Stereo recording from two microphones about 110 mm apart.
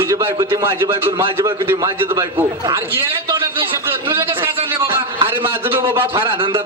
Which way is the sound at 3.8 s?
25° right (ahead or behind).